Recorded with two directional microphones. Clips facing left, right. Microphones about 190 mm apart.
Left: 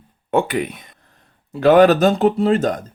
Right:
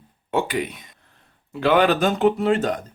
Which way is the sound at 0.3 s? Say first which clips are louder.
Left 4 dB; 55° left (ahead or behind).